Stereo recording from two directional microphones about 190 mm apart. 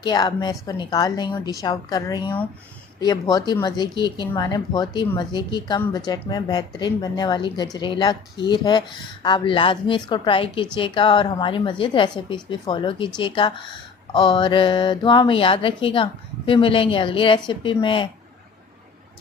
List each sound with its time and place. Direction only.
0.0 s a woman's voice: 20° left (ahead or behind)